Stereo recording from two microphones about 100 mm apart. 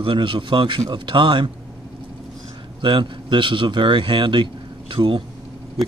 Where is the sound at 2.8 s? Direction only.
55° right (ahead or behind).